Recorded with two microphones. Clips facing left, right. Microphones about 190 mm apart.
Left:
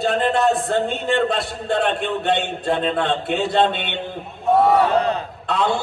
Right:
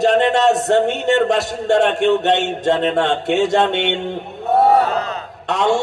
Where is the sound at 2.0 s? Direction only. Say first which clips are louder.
Right 6 dB; 80° right.